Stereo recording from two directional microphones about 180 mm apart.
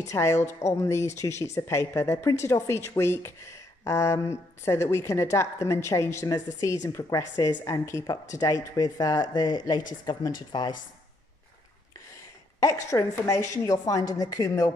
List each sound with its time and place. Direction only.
0.1 s speech: 15° left (ahead or behind)
12.9 s speech: 15° left (ahead or behind)